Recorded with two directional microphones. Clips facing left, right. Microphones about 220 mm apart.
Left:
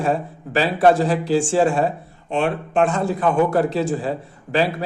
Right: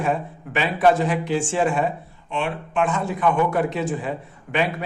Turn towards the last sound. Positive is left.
turn(degrees=35)  # may be behind; listen again after turning